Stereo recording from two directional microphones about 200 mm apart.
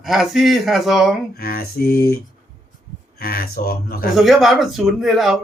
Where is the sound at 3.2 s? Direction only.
50° left (ahead or behind).